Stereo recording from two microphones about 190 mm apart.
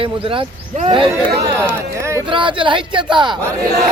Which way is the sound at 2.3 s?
25° right (ahead or behind).